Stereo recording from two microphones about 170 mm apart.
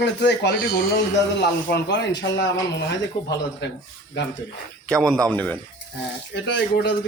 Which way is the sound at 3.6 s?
90° left.